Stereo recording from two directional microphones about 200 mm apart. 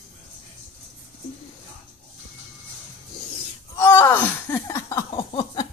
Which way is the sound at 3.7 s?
10° left (ahead or behind).